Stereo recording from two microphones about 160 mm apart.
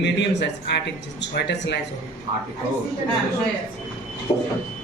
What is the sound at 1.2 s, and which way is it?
Speech, 90° left.